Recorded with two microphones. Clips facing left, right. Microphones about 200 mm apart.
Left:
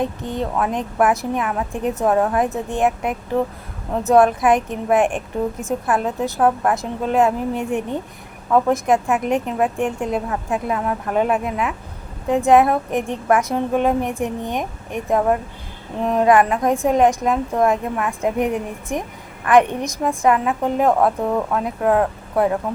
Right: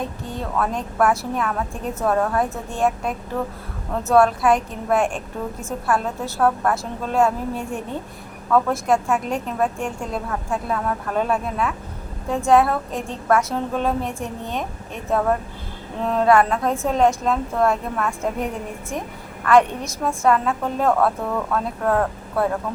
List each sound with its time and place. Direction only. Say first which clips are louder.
0.2 s a woman's voice: left 3 dB; 20° left (ahead or behind)